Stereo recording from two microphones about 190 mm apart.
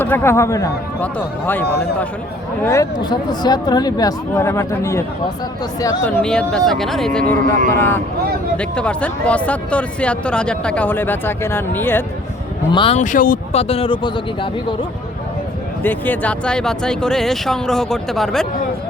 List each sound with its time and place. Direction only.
0.0 s speech: 10° left (ahead or behind)
1.6 s a man's voice: 60° left (ahead or behind)
2.6 s speech: 20° left (ahead or behind)
12.7 s speech: 25° left (ahead or behind)
13.0 s speech: 45° left (ahead or behind)
13.5 s speech: 30° left (ahead or behind)
15.8 s speech: 10° left (ahead or behind)